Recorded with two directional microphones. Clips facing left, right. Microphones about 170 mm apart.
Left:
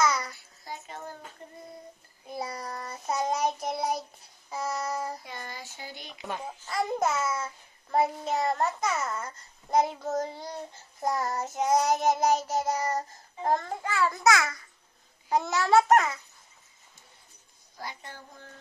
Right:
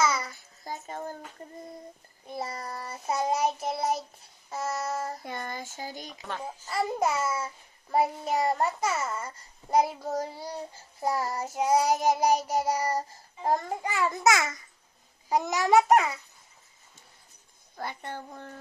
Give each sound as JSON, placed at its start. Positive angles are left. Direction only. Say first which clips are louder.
{"t": 0.0, "sound": "babbling", "louder": "even", "side_deg": -5}
{"t": 0.7, "sound": "a sound", "louder": "right 4 dB", "side_deg": -45}
{"t": 2.2, "sound": "child singing", "louder": "even", "side_deg": 0}
{"t": 5.2, "sound": "a sound", "louder": "right 5 dB", "side_deg": -50}
{"t": 6.6, "sound": "a child's voice", "louder": "even", "side_deg": -5}
{"t": 17.7, "sound": "a child's voice", "louder": "right 5 dB", "side_deg": -60}